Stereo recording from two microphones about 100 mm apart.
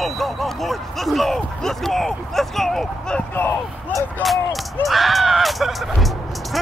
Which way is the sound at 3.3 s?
20° left (ahead or behind).